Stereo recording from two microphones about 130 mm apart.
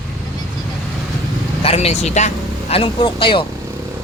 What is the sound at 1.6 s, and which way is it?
Speech, 50° left (ahead or behind).